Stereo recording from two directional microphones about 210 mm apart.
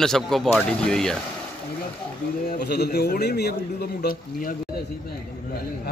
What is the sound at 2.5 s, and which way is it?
A man's voice, 50° left (ahead or behind).